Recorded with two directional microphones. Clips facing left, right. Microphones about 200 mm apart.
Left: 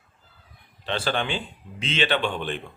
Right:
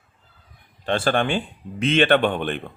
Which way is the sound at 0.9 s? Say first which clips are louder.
Right 6 dB; 50° right (ahead or behind).